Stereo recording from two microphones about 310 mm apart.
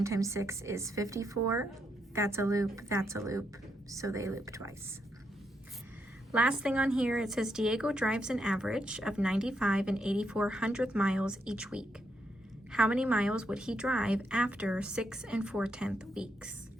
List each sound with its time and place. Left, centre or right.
0.0 s a woman's voice: centre
6.3 s a woman's voice: centre